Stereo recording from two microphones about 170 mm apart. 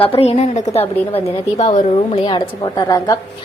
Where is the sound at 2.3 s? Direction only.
25° left (ahead or behind).